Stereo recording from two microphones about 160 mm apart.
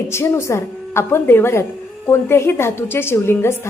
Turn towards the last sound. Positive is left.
turn(degrees=15)  # may be behind; listen again after turning